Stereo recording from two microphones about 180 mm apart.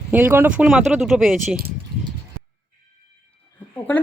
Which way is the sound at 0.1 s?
10° right (ahead or behind).